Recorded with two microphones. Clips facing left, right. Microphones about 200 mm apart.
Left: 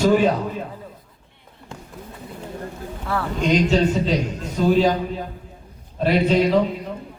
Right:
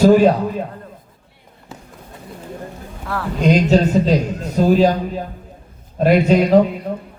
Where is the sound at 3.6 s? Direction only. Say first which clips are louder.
Right 4 dB; 40° right (ahead or behind).